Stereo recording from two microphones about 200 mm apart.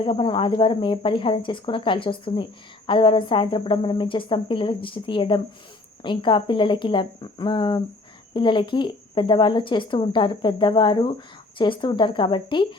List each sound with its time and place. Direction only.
0.0 s speech: 25° left (ahead or behind)